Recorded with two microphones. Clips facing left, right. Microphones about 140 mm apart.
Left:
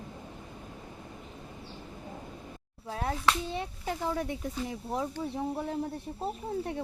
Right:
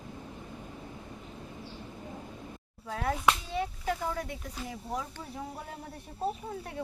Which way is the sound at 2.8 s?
30° left (ahead or behind).